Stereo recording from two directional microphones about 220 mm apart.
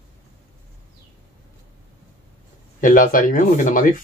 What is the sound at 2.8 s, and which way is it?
Speech, 40° left (ahead or behind).